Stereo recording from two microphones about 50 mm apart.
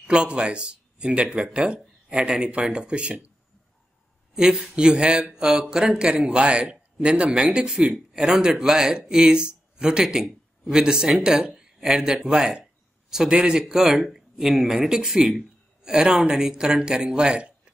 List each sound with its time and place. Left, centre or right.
0.0 s speech: centre
4.4 s a man's voice: centre
10.0 s a man's voice: centre